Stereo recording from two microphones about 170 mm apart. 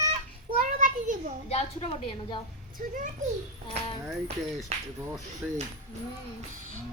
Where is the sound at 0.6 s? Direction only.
50° right (ahead or behind).